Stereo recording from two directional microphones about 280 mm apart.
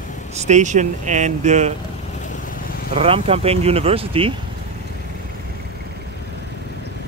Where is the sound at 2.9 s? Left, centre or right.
Right.